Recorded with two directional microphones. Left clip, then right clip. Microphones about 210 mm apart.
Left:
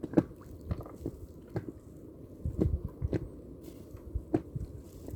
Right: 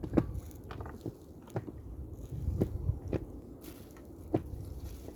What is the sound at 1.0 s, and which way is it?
Biting, 15° left (ahead or behind).